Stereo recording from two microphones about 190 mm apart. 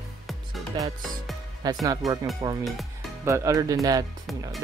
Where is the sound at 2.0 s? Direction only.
Centre (ahead or behind).